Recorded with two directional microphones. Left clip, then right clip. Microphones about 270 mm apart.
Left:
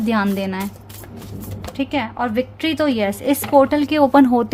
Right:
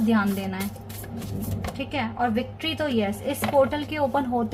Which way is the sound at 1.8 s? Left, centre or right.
Left.